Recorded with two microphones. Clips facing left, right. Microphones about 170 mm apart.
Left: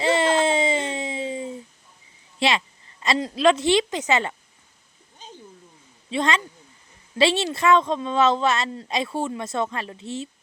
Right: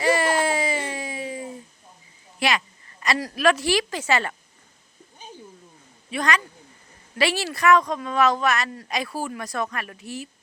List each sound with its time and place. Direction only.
0.0 s a sound: 25° left (ahead or behind)
2.4 s a woman's voice: 25° left (ahead or behind)
6.1 s a woman's voice: 25° left (ahead or behind)